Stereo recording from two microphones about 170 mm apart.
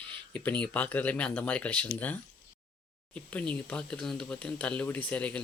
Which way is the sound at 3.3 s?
5° left (ahead or behind).